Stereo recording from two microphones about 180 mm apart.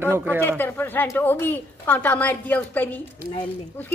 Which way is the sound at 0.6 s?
10° left (ahead or behind).